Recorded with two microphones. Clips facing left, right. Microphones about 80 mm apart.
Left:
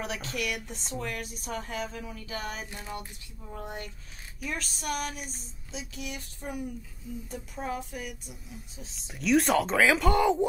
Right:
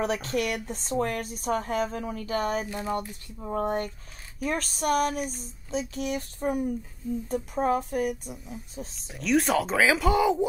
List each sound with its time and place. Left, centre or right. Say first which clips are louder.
0.0 s speech: right 7 dB; right
8.3 s speech: right 6 dB; centre